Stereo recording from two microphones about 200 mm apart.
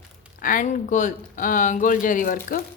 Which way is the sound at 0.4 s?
40° left (ahead or behind).